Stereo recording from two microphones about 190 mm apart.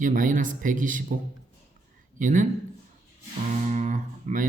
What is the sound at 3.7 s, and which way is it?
Guitar, 40° right (ahead or behind).